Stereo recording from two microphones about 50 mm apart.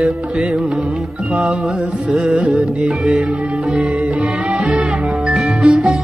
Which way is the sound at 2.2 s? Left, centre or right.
Right.